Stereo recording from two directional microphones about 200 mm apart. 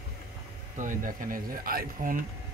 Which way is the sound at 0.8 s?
40° right (ahead or behind).